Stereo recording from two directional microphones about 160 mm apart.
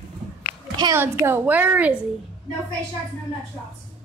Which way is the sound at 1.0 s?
15° right (ahead or behind).